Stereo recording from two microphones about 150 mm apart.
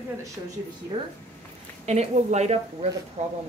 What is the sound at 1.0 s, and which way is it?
Speech, 35° right (ahead or behind).